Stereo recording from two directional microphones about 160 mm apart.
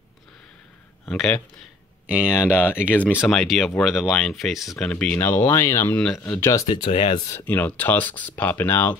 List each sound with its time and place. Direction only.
1.0 s speech: 5° left (ahead or behind)
2.0 s speech: 10° right (ahead or behind)
2.5 s speech: 15° left (ahead or behind)
3.3 s speech: centre (ahead or behind)
6.5 s speech: 30° left (ahead or behind)
6.9 s speech: 40° left (ahead or behind)
7.2 s speech: 10° left (ahead or behind)